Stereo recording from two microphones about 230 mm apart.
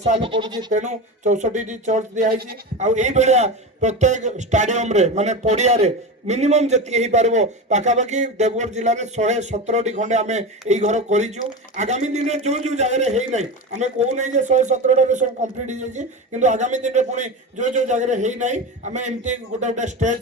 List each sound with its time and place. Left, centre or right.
0.0 s speech: right
0.7 s speech: right